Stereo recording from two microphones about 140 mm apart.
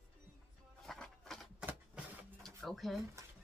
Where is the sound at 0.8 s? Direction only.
Centre (ahead or behind).